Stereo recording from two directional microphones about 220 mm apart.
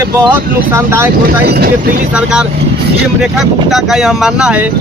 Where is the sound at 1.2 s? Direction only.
45° right (ahead or behind).